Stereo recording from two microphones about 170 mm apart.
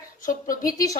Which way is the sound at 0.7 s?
20° left (ahead or behind).